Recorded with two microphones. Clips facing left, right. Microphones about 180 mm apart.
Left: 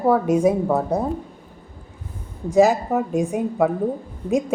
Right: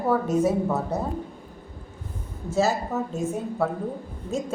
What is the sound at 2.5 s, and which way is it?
A woman's voice, 15° left (ahead or behind).